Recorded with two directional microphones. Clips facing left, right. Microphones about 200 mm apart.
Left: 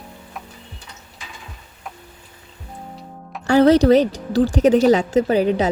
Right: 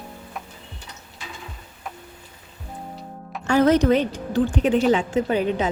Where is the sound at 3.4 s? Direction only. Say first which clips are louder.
Left 4 dB; 35° left (ahead or behind).